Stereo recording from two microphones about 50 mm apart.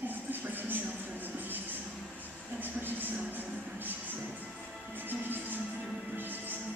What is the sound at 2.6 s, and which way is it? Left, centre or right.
Music, right.